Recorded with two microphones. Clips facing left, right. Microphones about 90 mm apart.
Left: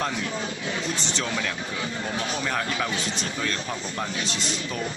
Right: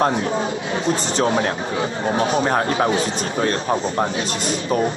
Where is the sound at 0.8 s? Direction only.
40° right (ahead or behind).